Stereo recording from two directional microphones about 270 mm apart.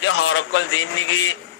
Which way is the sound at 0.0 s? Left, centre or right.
Left.